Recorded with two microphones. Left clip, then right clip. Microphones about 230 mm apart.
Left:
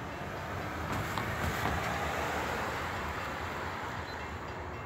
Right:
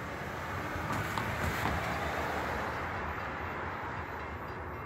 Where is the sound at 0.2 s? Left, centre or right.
Centre; by 4.0 s left.